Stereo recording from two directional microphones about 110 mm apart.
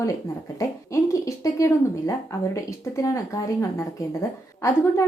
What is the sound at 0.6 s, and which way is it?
A woman's voice, 30° left (ahead or behind).